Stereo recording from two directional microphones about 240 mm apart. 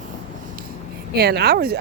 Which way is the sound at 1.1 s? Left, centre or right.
Right.